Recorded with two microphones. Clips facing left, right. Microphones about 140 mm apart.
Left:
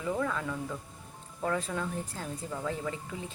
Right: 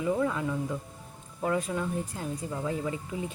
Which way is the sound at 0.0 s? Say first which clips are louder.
Right 4 dB; 20° right (ahead or behind).